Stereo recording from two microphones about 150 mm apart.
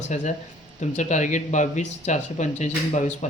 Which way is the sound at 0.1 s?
55° left (ahead or behind).